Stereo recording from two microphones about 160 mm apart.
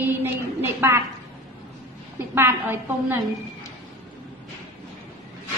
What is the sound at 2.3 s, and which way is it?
Speech, 15° right (ahead or behind).